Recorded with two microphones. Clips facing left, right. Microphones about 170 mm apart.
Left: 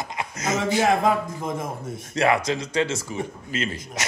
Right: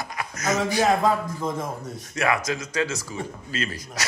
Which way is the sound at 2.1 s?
30° left (ahead or behind).